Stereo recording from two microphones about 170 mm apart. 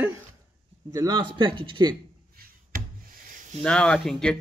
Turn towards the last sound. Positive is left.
turn(degrees=5)  # may be behind; listen again after turning